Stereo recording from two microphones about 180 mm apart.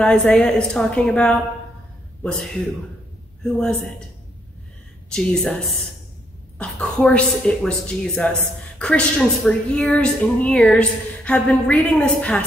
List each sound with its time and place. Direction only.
0.0 s a woman's voice: 5° left (ahead or behind)
3.5 s a woman's voice: 5° left (ahead or behind)
5.1 s a woman's voice: 5° left (ahead or behind)